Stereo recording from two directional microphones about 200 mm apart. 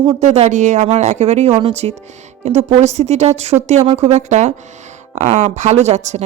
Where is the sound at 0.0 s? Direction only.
25° right (ahead or behind).